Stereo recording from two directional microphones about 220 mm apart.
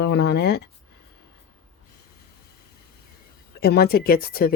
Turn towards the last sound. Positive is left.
turn(degrees=40)  # may be behind; listen again after turning